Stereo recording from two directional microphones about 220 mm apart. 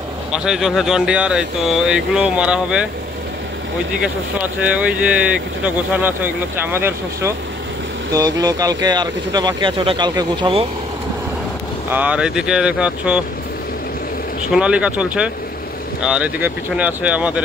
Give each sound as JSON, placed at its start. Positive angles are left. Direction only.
{"t": 0.3, "sound": "speech", "side_deg": -5}
{"t": 4.0, "sound": "speech", "side_deg": -5}
{"t": 11.9, "sound": "speech", "side_deg": -5}
{"t": 14.5, "sound": "speech", "side_deg": -5}